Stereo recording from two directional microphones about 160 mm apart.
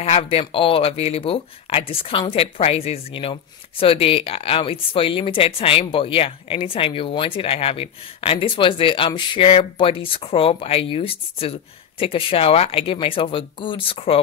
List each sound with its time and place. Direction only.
0.0 s speech: 40° left (ahead or behind)